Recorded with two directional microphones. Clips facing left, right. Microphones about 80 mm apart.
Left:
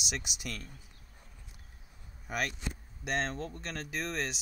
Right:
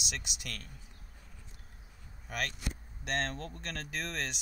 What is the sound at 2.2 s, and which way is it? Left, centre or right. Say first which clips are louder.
Speech: left 3 dB; centre.